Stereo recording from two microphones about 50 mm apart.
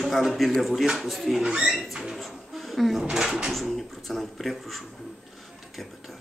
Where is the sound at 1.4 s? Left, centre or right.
Centre.